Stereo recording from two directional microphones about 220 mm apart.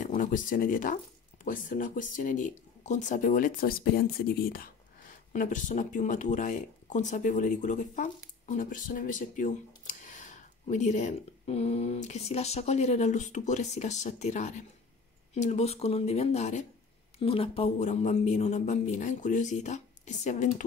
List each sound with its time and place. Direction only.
0.0 s speech: 35° left (ahead or behind)